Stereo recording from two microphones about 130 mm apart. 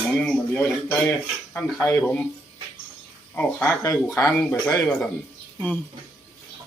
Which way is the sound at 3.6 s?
20° left (ahead or behind).